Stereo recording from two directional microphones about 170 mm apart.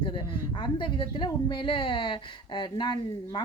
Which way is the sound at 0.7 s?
25° left (ahead or behind).